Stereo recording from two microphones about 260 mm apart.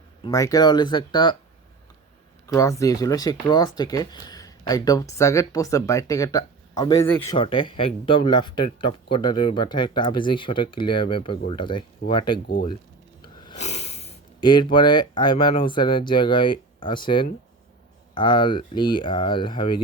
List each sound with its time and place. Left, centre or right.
0.2 s speech: centre
2.5 s speech: centre